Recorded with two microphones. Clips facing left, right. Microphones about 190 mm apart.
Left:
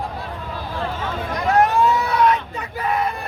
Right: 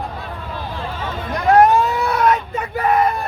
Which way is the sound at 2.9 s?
45° right (ahead or behind).